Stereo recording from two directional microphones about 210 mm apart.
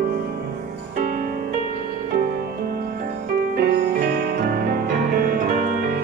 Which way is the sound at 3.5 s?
50° right (ahead or behind).